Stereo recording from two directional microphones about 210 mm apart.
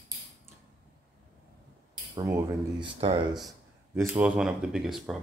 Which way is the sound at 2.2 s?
15° right (ahead or behind).